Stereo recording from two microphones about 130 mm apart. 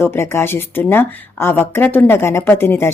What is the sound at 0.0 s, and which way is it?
Speech, 20° left (ahead or behind).